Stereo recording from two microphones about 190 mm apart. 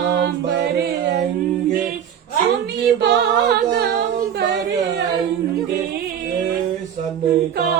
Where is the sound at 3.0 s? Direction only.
65° right (ahead or behind).